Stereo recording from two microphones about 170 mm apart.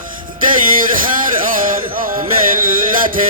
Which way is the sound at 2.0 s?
55° right (ahead or behind).